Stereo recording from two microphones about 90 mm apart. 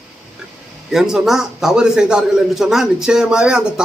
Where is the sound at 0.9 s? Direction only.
5° right (ahead or behind).